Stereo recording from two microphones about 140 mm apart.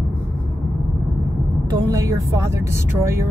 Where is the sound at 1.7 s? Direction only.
25° right (ahead or behind).